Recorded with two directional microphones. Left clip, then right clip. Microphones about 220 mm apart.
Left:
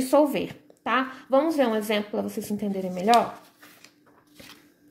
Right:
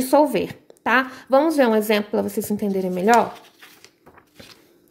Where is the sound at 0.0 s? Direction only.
20° right (ahead or behind).